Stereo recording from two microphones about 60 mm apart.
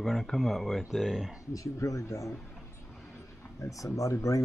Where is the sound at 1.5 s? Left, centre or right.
Left.